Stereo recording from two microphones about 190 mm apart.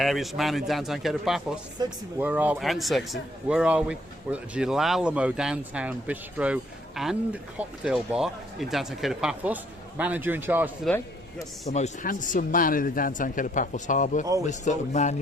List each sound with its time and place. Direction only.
0.0 s speech: centre (ahead or behind)
1.8 s speech: 20° right (ahead or behind)
2.1 s a man's voice: 10° right (ahead or behind)
10.8 s a man's voice: 15° left (ahead or behind)
11.7 s a man's voice: 40° left (ahead or behind)